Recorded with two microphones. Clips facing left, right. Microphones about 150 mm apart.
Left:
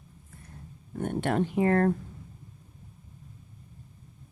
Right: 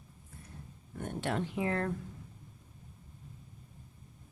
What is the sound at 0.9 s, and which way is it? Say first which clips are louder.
Speech: left 7 dB; 55° left (ahead or behind).